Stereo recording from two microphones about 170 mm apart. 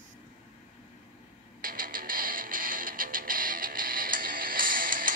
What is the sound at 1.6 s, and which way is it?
Music, 55° right (ahead or behind).